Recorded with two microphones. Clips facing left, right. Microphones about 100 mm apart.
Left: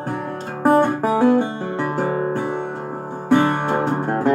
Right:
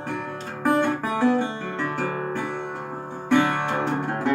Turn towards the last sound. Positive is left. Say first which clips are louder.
# left 5 dB
turn(degrees=40)  # may be behind; listen again after turning